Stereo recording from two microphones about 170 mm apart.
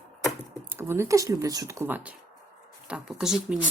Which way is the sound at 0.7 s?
15° right (ahead or behind).